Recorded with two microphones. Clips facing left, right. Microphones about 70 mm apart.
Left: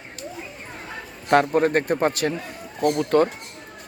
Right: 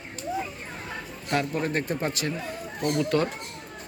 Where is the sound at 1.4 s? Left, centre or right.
Left.